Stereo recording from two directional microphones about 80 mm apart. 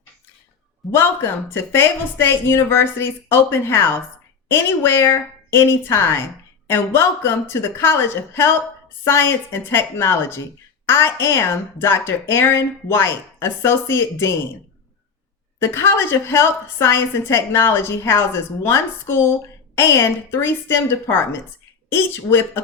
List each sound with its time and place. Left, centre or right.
0.9 s a woman's voice: left
15.6 s a woman's voice: left